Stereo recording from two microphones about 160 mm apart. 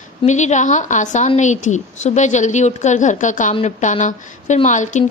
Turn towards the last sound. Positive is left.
turn(degrees=50)  # may be behind; listen again after turning